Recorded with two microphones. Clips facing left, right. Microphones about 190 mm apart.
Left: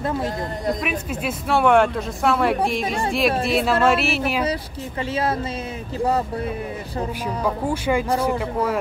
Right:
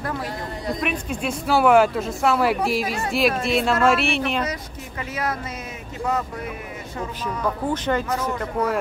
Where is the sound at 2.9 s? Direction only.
30° left (ahead or behind).